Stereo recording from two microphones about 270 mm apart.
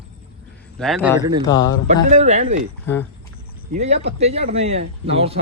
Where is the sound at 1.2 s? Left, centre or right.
Centre.